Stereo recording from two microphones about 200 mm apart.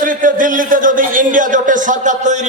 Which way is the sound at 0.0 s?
40° right (ahead or behind).